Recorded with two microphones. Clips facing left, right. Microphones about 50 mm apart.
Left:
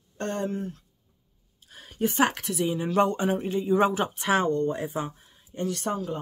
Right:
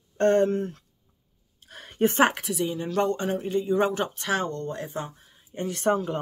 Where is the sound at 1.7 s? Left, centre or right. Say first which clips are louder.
Right 4 dB; right.